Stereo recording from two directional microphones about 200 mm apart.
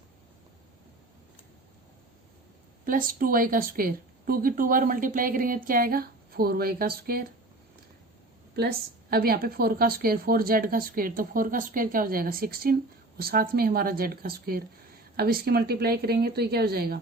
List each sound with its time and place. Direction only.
2.8 s a woman's voice: 45° right (ahead or behind)
8.5 s a woman's voice: 50° right (ahead or behind)